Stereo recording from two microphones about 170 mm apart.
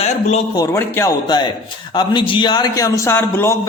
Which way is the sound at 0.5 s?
20° left (ahead or behind).